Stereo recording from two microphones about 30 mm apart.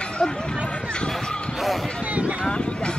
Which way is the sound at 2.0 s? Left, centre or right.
Right.